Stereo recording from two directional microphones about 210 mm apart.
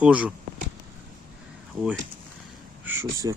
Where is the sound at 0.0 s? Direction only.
5° right (ahead or behind).